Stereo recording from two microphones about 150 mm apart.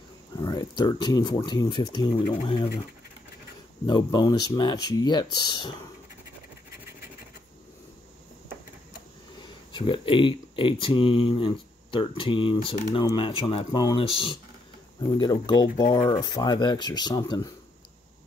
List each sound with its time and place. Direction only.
0.4 s speech: 25° left (ahead or behind)
3.8 s speech: 30° left (ahead or behind)
9.7 s speech: 35° left (ahead or behind)
15.6 s speech: 70° left (ahead or behind)
15.9 s speech: 35° left (ahead or behind)